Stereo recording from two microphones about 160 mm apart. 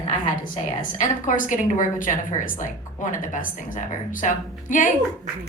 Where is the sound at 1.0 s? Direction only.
55° left (ahead or behind).